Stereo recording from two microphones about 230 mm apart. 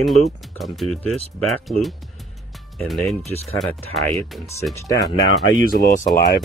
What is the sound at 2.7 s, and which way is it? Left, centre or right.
Speech, centre.